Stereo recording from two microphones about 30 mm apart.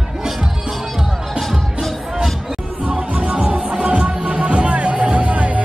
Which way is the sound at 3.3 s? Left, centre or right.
Right.